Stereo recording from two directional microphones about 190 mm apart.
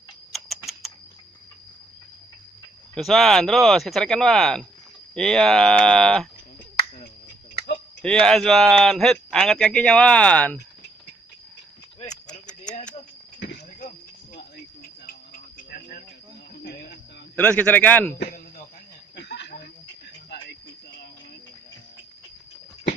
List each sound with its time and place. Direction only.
2.9 s a man's voice: centre (ahead or behind)
7.5 s a sound: 60° left (ahead or behind)
8.0 s a man's voice: 5° left (ahead or behind)
12.1 s a sound: 5° left (ahead or behind)
13.7 s cricket: 45° left (ahead or behind)
17.4 s a man's voice: 10° left (ahead or behind)
18.1 s speech: 55° left (ahead or behind)
19.1 s a sound: 60° left (ahead or behind)
20.3 s cricket: 60° left (ahead or behind)